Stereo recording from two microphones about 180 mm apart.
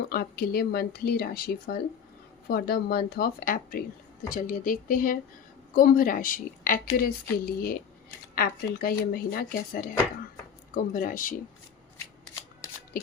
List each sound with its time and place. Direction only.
0.0 s a woman's voice: 55° left (ahead or behind)
10.9 s a woman's voice: 50° left (ahead or behind)